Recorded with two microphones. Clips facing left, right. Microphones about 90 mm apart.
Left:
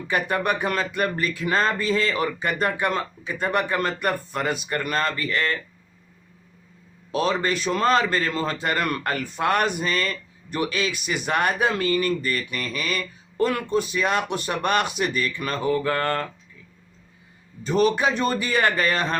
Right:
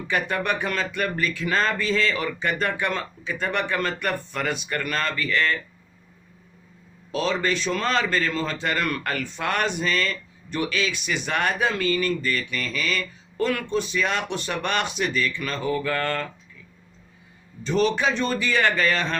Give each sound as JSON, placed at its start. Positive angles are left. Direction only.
{"t": 0.3, "sound": "speech", "side_deg": 40}
{"t": 7.1, "sound": "speech", "side_deg": 45}
{"t": 17.6, "sound": "speech", "side_deg": 45}